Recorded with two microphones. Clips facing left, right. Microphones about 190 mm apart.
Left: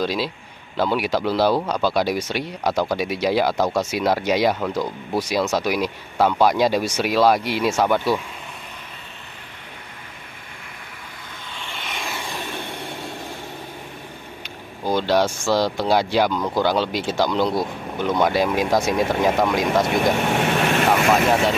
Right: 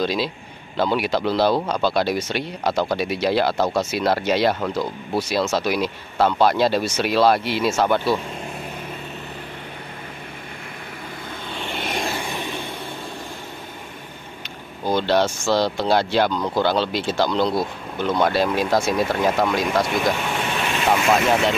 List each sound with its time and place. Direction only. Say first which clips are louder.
0.0 s speech: right 1 dB; 10° left (ahead or behind)
11.8 s vehicle: right 5 dB; 40° right (ahead or behind)
14.9 s speech: even; 10° left (ahead or behind)
21.1 s speech: left 1 dB; 5° left (ahead or behind)